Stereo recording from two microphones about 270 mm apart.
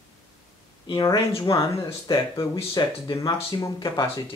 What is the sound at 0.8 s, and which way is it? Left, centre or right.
Speech, centre.